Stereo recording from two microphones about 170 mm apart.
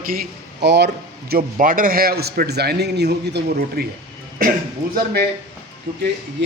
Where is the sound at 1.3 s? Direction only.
55° right (ahead or behind); by 3.9 s 75° right (ahead or behind).